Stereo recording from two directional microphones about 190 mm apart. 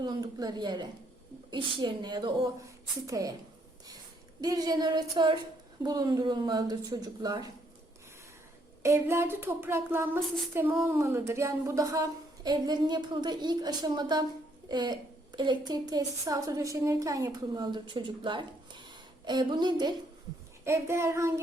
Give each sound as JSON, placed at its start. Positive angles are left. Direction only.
{"t": 0.0, "sound": "a woman's voice", "side_deg": -20}
{"t": 4.4, "sound": "a woman's voice", "side_deg": -20}
{"t": 8.8, "sound": "a woman's voice", "side_deg": -15}